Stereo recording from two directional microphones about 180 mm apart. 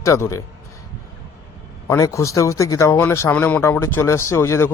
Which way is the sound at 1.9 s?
15° left (ahead or behind).